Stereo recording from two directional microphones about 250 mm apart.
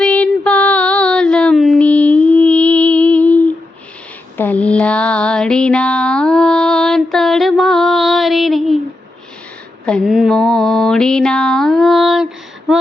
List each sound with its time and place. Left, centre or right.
0.0 s child singing: centre
4.4 s a sound: centre
9.8 s mantra: centre